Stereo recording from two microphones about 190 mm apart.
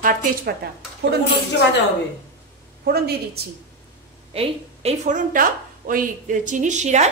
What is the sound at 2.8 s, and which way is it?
Speech, 55° right (ahead or behind).